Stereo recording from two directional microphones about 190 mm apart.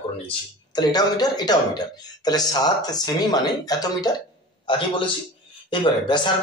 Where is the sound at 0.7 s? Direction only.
20° left (ahead or behind).